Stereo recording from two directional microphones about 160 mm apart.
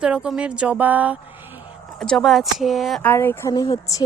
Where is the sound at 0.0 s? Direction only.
5° right (ahead or behind).